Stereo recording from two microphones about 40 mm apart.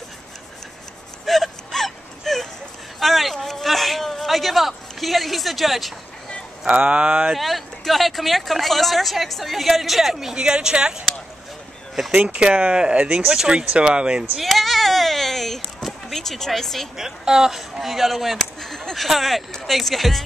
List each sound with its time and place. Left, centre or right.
1.2 s whimper: centre
3.0 s a sound: centre
6.7 s speech: right
7.3 s speech: centre
10.3 s speech: right
12.2 s speech: right
14.4 s a sound: centre
16.9 s speech: centre